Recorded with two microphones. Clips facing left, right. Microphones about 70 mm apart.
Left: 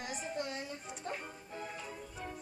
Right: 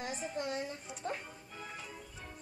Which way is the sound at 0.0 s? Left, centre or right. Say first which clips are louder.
Right 1 dB; right.